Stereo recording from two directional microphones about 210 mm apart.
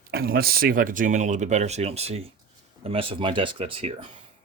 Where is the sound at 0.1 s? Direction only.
45° right (ahead or behind); by 4.1 s 30° right (ahead or behind).